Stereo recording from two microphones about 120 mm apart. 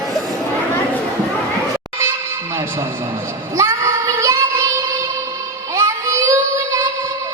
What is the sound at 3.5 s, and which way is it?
Child singing, 25° right (ahead or behind).